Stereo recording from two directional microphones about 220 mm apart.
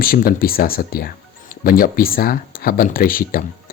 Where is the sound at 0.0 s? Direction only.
40° left (ahead or behind).